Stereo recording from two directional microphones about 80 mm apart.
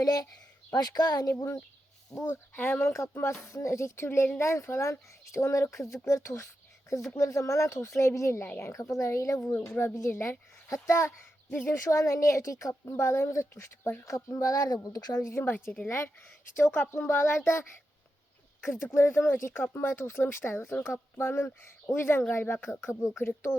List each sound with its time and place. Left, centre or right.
0.0 s speech: left
2.1 s speech: left
15.3 s speech: left
18.6 s speech: left